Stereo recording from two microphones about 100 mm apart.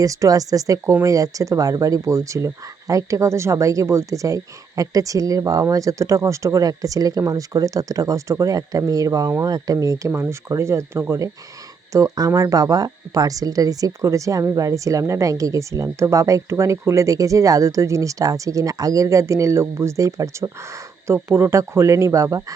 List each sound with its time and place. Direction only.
0.0 s a woman's voice: 35° right (ahead or behind)